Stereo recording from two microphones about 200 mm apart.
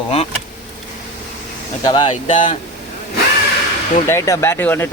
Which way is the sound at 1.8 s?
25° left (ahead or behind).